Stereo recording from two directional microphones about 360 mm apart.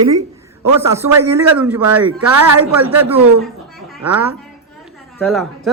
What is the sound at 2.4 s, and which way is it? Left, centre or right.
Speech, right.